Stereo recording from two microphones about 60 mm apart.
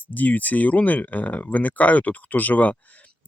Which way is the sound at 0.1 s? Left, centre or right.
Left.